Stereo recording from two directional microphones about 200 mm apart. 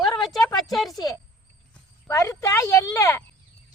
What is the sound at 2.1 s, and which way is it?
A woman's voice, 15° left (ahead or behind).